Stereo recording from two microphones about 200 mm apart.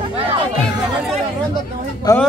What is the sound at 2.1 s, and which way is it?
Speech, 15° left (ahead or behind).